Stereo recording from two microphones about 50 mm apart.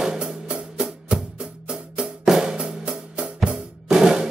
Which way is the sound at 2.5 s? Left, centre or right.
Centre.